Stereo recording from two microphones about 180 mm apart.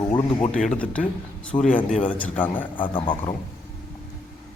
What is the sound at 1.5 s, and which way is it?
Speech, 35° left (ahead or behind).